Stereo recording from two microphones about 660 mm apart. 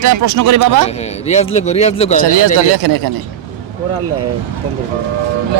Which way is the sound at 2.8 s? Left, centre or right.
Right.